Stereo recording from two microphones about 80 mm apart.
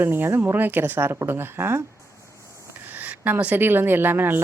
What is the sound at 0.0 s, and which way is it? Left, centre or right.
A woman's voice, right.